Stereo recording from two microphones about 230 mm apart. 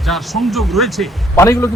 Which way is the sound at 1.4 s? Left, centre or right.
Centre.